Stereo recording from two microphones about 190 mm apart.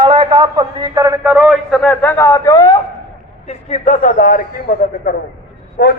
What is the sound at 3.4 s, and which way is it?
A man's voice, 35° left (ahead or behind).